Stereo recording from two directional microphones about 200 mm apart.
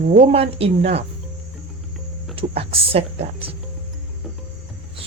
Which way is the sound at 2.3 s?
30° right (ahead or behind).